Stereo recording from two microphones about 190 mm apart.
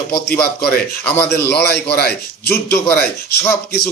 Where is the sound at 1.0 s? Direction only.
10° left (ahead or behind).